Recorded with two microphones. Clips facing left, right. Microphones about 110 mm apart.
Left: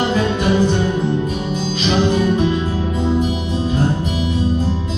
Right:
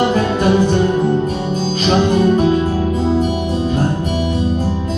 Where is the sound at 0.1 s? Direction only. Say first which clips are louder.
Right 3 dB; 45° right (ahead or behind).